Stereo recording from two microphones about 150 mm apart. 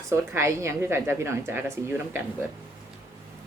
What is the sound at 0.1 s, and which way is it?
A woman's voice, 15° right (ahead or behind).